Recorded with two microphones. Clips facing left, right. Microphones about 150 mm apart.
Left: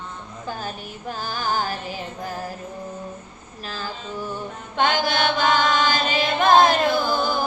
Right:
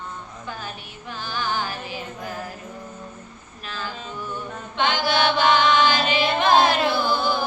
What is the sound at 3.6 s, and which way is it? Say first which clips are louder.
Music: left 1 dB; 35° left (ahead or behind).